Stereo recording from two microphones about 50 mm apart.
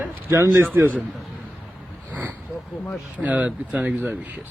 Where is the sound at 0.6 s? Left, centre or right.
Right.